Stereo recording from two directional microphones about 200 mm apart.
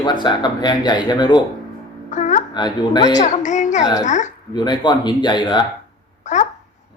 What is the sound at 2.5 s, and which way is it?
Speech, 20° left (ahead or behind).